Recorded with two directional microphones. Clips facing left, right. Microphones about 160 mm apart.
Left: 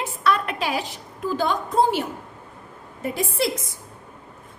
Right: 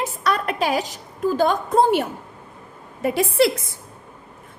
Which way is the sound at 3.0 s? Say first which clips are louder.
Right 6 dB; 75° right (ahead or behind).